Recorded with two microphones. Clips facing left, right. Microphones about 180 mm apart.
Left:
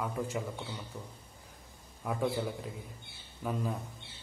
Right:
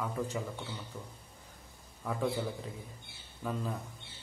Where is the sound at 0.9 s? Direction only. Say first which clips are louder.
Left 1 dB; 15° left (ahead or behind).